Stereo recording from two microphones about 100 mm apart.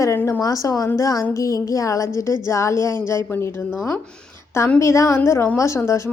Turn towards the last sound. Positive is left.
turn(degrees=30)  # may be behind; listen again after turning